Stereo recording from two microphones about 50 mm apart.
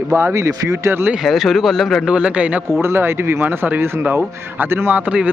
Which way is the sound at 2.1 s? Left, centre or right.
Right.